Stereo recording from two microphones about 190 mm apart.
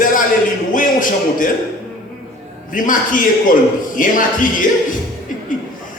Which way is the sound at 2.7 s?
45° left (ahead or behind).